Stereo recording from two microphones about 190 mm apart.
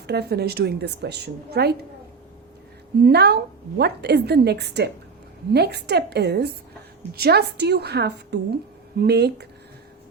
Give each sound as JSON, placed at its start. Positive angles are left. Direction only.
{"t": 0.1, "sound": "a woman's voice", "side_deg": -60}
{"t": 3.0, "sound": "a woman's voice", "side_deg": -60}